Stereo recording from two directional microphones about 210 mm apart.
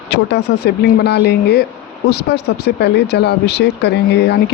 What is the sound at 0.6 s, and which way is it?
Speech, 50° left (ahead or behind).